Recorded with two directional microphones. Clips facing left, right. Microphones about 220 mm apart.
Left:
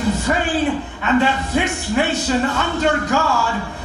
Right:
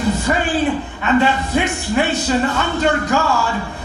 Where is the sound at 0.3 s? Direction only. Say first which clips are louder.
Right 1 dB; 25° right (ahead or behind).